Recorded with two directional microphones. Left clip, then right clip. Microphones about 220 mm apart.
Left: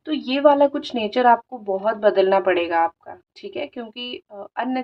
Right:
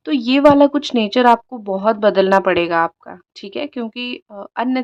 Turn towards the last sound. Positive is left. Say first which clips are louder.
# right 5 dB
turn(degrees=-40)  # may be behind; listen again after turning